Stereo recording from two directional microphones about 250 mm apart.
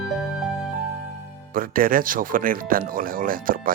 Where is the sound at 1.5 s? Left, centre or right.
Right.